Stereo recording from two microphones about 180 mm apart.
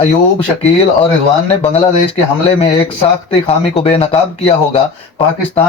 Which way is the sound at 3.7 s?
35° left (ahead or behind).